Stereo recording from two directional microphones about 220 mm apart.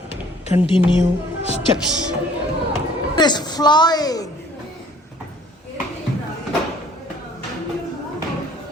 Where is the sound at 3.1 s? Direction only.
20° left (ahead or behind).